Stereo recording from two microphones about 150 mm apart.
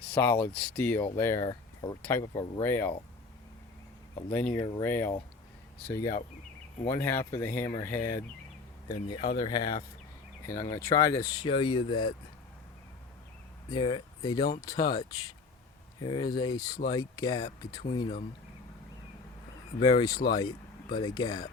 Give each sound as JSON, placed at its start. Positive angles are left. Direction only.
{"t": 0.1, "sound": "speech", "side_deg": 10}
{"t": 2.0, "sound": "speech", "side_deg": 10}
{"t": 4.3, "sound": "speech", "side_deg": 10}
{"t": 5.9, "sound": "speech", "side_deg": 25}
{"t": 13.7, "sound": "speech", "side_deg": 30}
{"t": 19.8, "sound": "speech", "side_deg": 25}